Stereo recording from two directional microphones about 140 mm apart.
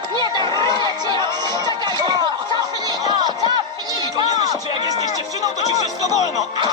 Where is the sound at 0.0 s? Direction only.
30° right (ahead or behind).